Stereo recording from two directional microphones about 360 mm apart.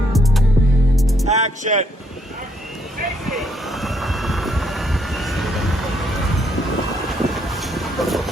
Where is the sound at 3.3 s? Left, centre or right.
Centre.